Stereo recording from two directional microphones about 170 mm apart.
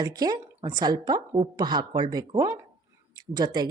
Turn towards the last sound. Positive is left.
turn(degrees=-25)  # may be behind; listen again after turning